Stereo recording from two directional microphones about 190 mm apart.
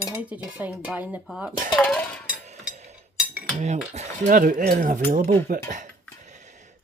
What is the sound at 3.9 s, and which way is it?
Speech, 45° right (ahead or behind).